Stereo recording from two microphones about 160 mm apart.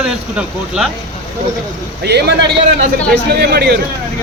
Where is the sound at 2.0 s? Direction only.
90° right.